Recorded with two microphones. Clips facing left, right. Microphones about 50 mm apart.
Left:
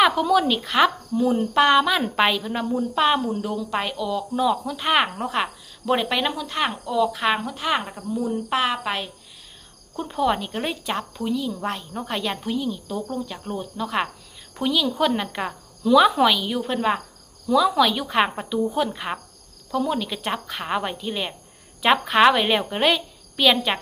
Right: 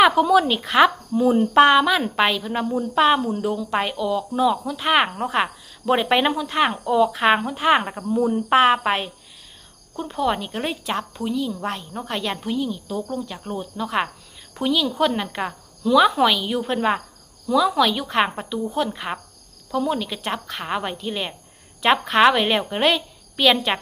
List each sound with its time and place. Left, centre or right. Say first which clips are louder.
0.0 s speech: right 3 dB; centre
6.8 s cricket: right 3 dB; right
9.9 s a woman's voice: even; centre